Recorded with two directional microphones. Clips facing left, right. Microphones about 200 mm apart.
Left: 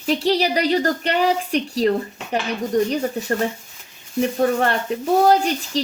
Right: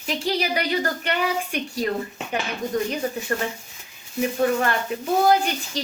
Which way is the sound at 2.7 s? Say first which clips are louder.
Left 6 dB; 35° left (ahead or behind).